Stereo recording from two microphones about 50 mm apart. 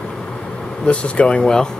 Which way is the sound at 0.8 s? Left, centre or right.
Left.